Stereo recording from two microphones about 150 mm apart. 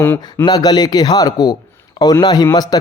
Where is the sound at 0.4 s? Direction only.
25° left (ahead or behind).